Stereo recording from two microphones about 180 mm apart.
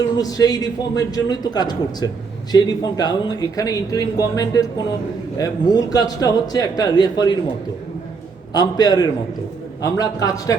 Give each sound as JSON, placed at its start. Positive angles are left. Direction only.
{"t": 0.2, "sound": "a man's voice", "side_deg": 20}
{"t": 8.5, "sound": "a man's voice", "side_deg": 20}